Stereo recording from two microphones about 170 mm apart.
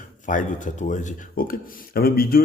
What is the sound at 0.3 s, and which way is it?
Speech, 50° left (ahead or behind).